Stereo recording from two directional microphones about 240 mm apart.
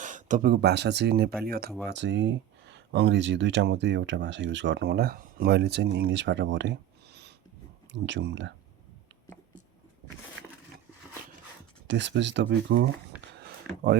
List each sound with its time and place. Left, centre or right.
0.0 s speech: right
11.9 s speech: right